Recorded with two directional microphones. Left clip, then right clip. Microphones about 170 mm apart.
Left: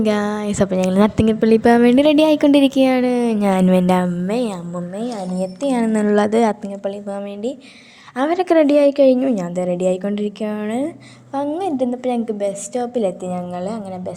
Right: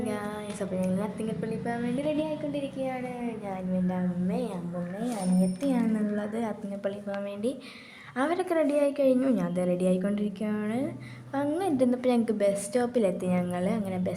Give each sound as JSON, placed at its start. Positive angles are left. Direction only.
{"t": 0.0, "sound": "speech", "side_deg": 60}
{"t": 5.6, "sound": "a woman's voice", "side_deg": 45}
{"t": 8.2, "sound": "a woman's voice", "side_deg": 35}
{"t": 11.3, "sound": "a woman's voice", "side_deg": 20}